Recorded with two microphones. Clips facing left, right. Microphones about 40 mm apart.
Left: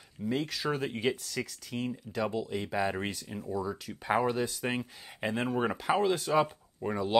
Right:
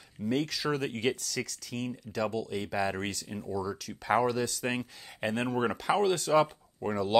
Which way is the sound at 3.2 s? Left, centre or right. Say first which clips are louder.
Right 1 dB; centre.